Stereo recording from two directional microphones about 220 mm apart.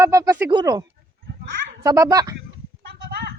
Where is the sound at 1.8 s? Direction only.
15° right (ahead or behind).